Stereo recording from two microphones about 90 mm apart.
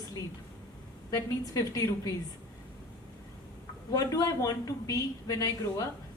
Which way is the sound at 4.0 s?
40° left (ahead or behind).